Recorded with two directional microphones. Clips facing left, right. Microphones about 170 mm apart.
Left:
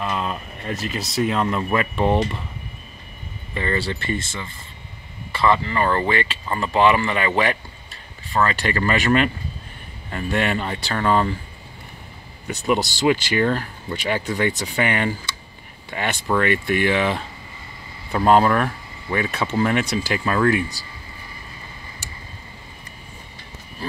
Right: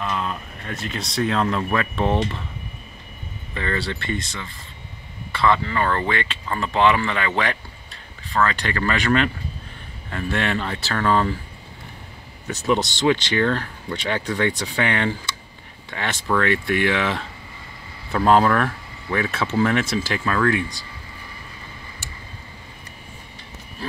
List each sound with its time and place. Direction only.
0.0 s a sound: 15° left (ahead or behind)
0.7 s speech: 5° left (ahead or behind)
3.5 s speech: 5° left (ahead or behind)
5.3 s speech: 5° left (ahead or behind)
13.0 s speech: 10° left (ahead or behind)